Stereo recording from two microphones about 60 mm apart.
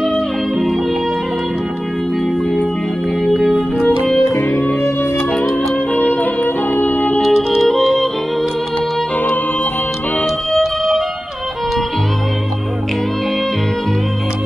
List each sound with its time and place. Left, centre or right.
0.1 s music: centre
3.3 s organ: centre
4.5 s music: left
5.9 s music: left
7.2 s music: centre
10.2 s music: centre